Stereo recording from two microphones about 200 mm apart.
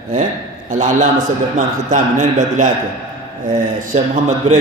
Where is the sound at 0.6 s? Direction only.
40° right (ahead or behind).